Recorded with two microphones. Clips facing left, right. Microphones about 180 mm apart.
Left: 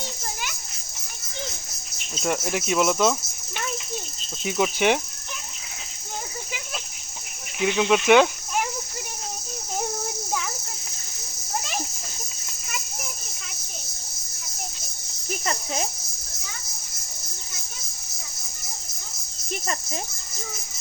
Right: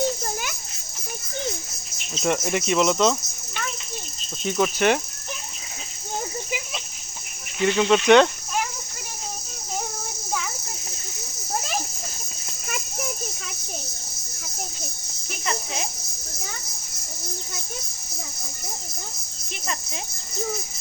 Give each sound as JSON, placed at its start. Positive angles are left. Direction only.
{"t": 2.1, "sound": "speech", "side_deg": 5}
{"t": 7.6, "sound": "speech", "side_deg": 5}
{"t": 15.4, "sound": "a sound", "side_deg": 40}